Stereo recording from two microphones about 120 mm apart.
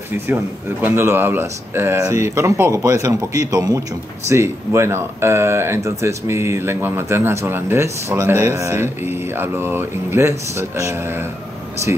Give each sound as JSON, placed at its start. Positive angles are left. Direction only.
{"t": 0.3, "sound": "speech", "side_deg": -20}